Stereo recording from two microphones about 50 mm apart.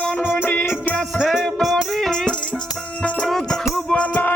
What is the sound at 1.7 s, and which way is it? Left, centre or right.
Music, centre.